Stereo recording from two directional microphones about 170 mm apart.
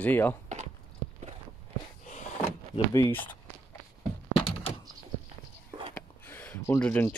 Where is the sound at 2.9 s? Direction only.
15° left (ahead or behind).